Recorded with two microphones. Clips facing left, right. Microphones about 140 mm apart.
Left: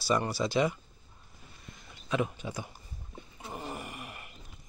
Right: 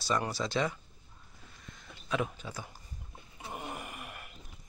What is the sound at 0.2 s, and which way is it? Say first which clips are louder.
Speech: left 4 dB; 5° left (ahead or behind).